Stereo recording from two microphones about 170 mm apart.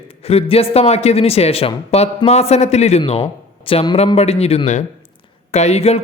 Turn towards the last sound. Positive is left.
turn(degrees=40)  # may be behind; listen again after turning